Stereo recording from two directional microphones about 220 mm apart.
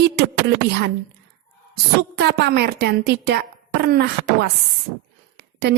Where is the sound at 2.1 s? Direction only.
50° right (ahead or behind).